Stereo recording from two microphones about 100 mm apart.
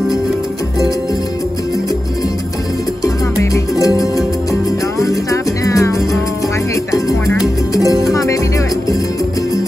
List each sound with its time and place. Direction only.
3.0 s music: 35° left (ahead or behind)